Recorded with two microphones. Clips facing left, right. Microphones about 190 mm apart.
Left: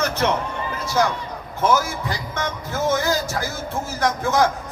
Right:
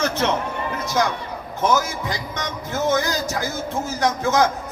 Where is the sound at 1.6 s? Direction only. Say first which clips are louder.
Left 1 dB; 15° right (ahead or behind).